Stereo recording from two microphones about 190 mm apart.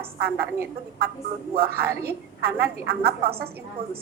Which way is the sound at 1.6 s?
55° right (ahead or behind).